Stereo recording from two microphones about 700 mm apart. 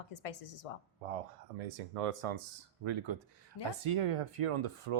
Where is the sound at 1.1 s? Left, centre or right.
Right.